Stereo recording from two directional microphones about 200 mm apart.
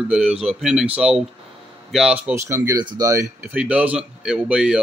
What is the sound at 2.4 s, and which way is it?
Speech, 15° right (ahead or behind).